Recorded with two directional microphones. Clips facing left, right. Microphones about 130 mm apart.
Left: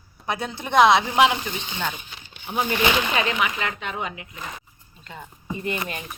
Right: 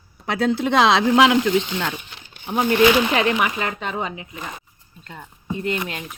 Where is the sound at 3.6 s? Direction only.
35° right (ahead or behind).